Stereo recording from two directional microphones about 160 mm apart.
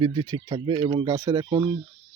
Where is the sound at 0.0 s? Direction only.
30° right (ahead or behind).